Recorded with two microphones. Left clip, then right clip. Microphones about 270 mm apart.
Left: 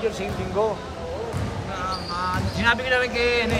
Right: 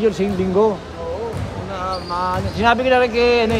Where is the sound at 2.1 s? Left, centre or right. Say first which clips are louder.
Right 7 dB; centre.